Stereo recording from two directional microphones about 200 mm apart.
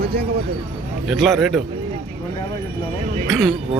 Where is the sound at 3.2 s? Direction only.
Centre (ahead or behind).